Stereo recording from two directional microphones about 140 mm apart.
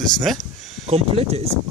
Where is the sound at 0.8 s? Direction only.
45° right (ahead or behind).